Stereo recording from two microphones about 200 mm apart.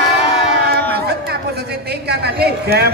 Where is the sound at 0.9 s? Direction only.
55° right (ahead or behind).